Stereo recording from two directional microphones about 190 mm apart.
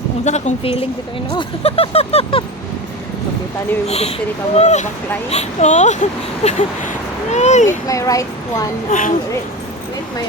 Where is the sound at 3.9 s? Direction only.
35° left (ahead or behind).